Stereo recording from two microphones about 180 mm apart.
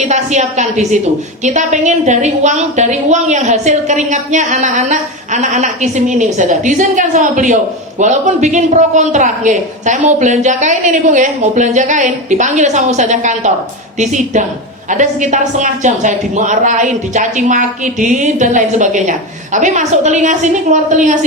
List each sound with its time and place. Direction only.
0.1 s a woman's voice: 40° right (ahead or behind)